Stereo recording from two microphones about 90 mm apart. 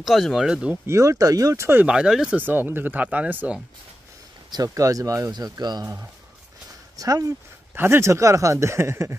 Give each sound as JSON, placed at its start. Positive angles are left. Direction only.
{"t": 0.0, "sound": "speech", "side_deg": 0}
{"t": 0.8, "sound": "speech", "side_deg": -35}
{"t": 1.8, "sound": "speech", "side_deg": -10}
{"t": 2.3, "sound": "speech", "side_deg": -20}
{"t": 4.5, "sound": "speech", "side_deg": -40}
{"t": 5.3, "sound": "speech", "side_deg": -50}
{"t": 7.0, "sound": "speech", "side_deg": -40}
{"t": 7.7, "sound": "speech", "side_deg": -25}